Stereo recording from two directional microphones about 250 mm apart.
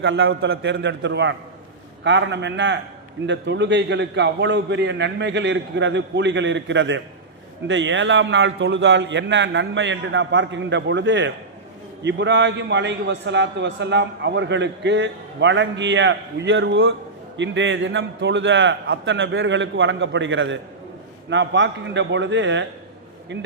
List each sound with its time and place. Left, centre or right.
0.0 s a man's voice: right